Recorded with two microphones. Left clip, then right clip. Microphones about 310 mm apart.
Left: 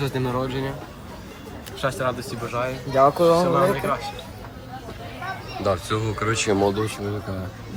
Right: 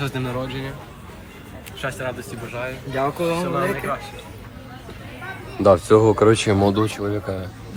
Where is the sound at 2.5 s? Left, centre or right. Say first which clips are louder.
Left 3 dB; left.